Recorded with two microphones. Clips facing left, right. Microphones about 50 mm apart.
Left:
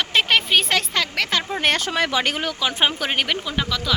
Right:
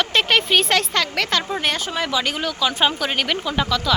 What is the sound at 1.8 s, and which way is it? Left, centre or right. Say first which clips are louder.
Speech: left 1 dB; left.